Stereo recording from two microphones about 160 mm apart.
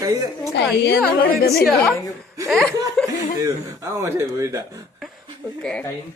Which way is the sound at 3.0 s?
5° left (ahead or behind).